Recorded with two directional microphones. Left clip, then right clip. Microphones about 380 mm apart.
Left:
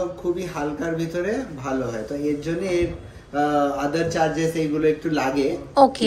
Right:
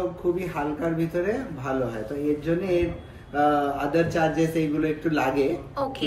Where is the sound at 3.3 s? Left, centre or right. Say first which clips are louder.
Left 1 dB; centre.